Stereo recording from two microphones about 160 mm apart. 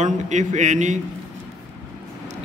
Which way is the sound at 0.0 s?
50° right (ahead or behind).